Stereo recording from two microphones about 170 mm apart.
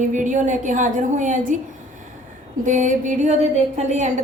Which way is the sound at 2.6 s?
50° right (ahead or behind).